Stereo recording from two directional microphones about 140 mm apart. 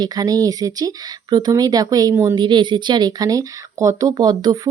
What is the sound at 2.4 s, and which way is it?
Speech, 35° right (ahead or behind).